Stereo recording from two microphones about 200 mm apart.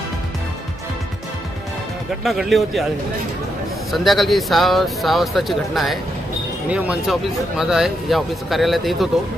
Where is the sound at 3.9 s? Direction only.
Centre (ahead or behind).